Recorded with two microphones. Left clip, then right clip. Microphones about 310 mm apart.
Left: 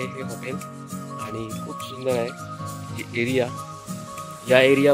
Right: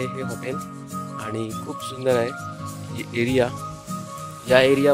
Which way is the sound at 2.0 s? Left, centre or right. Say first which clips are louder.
Right 4 dB; centre.